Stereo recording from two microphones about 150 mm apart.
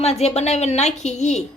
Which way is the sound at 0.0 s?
45° left (ahead or behind).